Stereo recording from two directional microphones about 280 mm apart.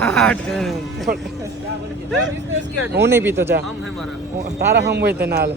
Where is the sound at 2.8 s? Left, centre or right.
Centre.